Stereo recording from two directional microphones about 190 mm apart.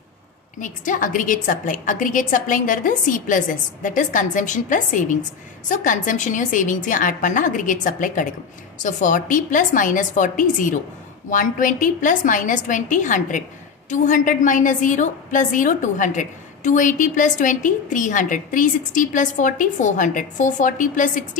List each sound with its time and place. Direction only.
0.6 s a woman's voice: 45° left (ahead or behind)